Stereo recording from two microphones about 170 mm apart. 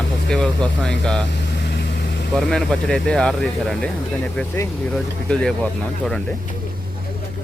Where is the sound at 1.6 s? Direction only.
75° left (ahead or behind).